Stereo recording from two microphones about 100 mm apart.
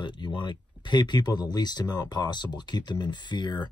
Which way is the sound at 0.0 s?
50° left (ahead or behind).